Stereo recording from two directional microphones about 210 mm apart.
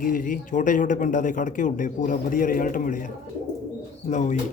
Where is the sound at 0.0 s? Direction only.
40° left (ahead or behind).